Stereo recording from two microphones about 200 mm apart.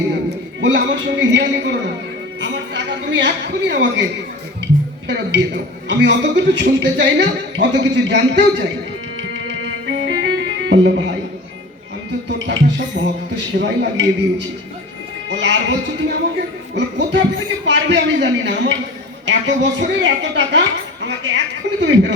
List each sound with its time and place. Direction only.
0.3 s a man's voice: 60° right (ahead or behind)
5.0 s a man's voice: 60° right (ahead or behind)
9.5 s music: 65° right (ahead or behind)
12.5 s a man's voice: 60° right (ahead or behind)